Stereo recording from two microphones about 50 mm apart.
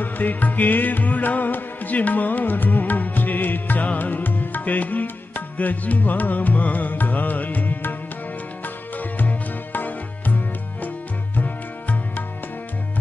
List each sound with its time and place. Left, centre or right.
0.0 s music: left